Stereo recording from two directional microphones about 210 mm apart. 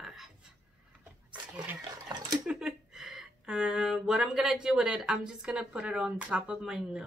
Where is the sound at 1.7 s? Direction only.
20° right (ahead or behind).